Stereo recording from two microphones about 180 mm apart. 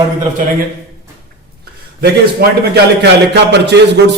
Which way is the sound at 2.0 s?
65° right (ahead or behind).